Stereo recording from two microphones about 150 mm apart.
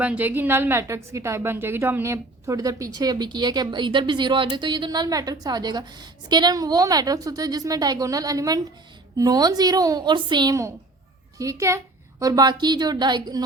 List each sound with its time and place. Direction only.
0.0 s a woman's voice: 10° right (ahead or behind); by 13.4 s 30° right (ahead or behind)